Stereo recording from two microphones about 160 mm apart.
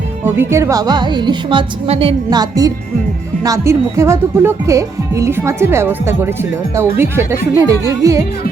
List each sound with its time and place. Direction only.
0.3 s speech: 15° right (ahead or behind)